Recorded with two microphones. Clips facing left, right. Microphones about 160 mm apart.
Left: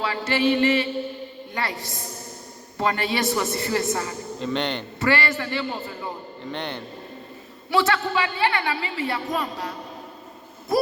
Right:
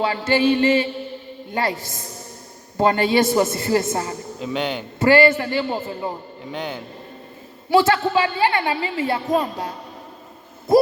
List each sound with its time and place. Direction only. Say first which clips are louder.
0.0 s a woman's voice: right 4 dB; 30° right (ahead or behind)
2.7 s a woman's voice: right 7 dB; 30° right (ahead or behind)
4.4 s speech: right 1 dB; 5° right (ahead or behind)
4.9 s a woman's voice: right 9 dB; 25° right (ahead or behind)
6.4 s speech: right 2 dB; 5° right (ahead or behind)
7.7 s a woman's voice: right 5 dB; 30° right (ahead or behind)